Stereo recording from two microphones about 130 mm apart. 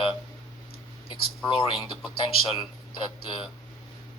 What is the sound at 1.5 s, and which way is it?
Speech, 40° left (ahead or behind).